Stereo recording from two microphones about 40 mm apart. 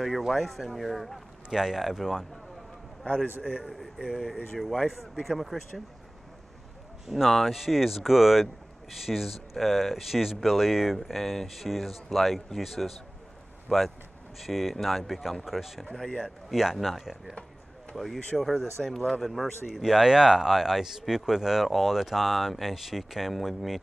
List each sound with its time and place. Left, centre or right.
0.2 s speech: centre
1.5 s speech: centre
4.3 s speech: centre
7.2 s speech: centre
7.5 s speech: centre
15.9 s speech: centre
16.4 s speech: centre
19.8 s speech: centre